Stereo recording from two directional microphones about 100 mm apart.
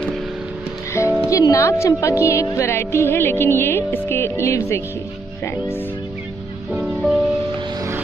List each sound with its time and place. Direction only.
1.0 s music: 30° left (ahead or behind)
1.3 s speech: 35° left (ahead or behind)
6.7 s music: 5° right (ahead or behind)